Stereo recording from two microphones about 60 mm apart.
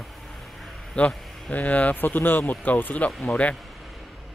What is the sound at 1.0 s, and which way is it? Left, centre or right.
Speech, left.